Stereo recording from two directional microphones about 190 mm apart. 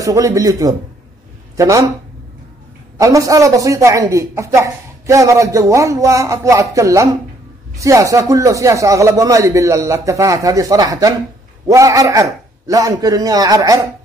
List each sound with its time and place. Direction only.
0.0 s a woman's voice: 15° right (ahead or behind)
3.0 s a woman's voice: 15° right (ahead or behind)